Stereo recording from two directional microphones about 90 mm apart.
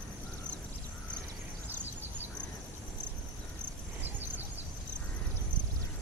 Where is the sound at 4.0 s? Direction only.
20° right (ahead or behind).